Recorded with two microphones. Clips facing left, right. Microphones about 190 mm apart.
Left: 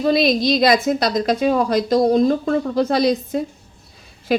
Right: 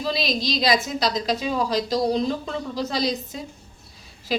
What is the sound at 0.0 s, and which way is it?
Speech, 55° left (ahead or behind).